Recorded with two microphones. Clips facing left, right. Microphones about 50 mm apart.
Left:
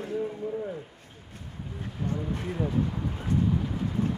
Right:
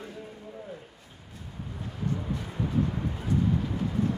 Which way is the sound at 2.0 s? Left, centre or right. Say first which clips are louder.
Even; left.